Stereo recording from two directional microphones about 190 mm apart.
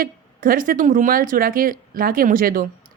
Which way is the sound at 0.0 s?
50° right (ahead or behind).